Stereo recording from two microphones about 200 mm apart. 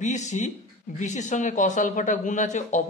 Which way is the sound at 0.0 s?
35° left (ahead or behind).